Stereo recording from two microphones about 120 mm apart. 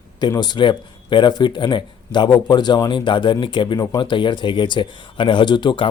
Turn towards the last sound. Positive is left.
turn(degrees=40)  # may be behind; listen again after turning